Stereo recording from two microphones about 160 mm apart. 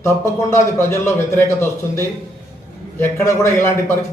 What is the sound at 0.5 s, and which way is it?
A man's voice, 15° left (ahead or behind).